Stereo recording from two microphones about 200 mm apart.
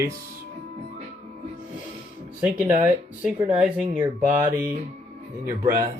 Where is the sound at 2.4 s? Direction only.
5° right (ahead or behind).